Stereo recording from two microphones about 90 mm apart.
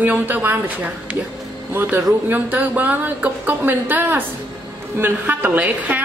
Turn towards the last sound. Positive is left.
turn(degrees=-20)  # may be behind; listen again after turning